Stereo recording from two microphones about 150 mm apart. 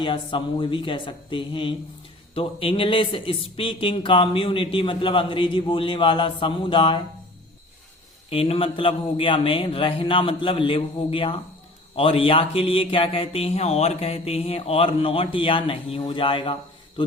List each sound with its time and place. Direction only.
0.0 s a man's voice: 35° left (ahead or behind)
8.3 s a man's voice: 35° left (ahead or behind)